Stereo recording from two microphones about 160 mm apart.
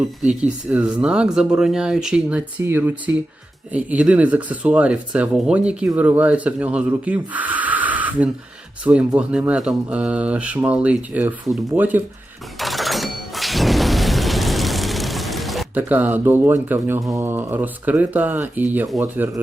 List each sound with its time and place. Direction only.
0.2 s speech: 5° right (ahead or behind)
12.5 s thunder: centre (ahead or behind)
15.7 s speech: 10° right (ahead or behind)